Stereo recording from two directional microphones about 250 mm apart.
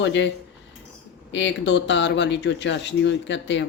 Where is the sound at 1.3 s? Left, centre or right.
Left.